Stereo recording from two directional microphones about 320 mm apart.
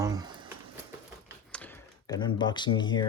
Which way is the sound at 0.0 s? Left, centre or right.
Centre.